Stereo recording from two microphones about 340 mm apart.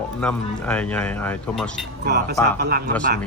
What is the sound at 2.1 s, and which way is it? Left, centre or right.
Speech, right.